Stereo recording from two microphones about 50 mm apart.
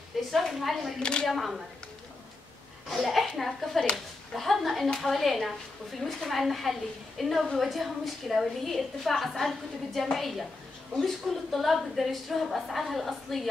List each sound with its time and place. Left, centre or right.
0.3 s a woman's voice: centre
0.9 s speech: centre
1.3 s a woman's voice: centre
2.9 s a woman's voice: centre